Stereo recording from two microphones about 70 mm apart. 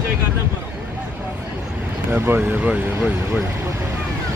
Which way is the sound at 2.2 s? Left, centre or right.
Right.